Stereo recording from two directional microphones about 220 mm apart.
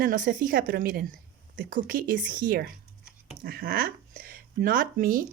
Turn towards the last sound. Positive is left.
turn(degrees=-40)  # may be behind; listen again after turning